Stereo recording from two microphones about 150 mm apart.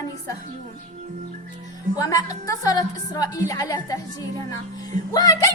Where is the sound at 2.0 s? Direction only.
25° left (ahead or behind).